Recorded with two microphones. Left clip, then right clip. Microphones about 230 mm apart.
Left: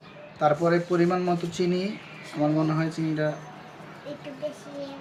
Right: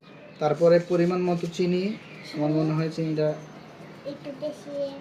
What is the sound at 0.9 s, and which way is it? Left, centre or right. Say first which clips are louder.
Speech: even; left.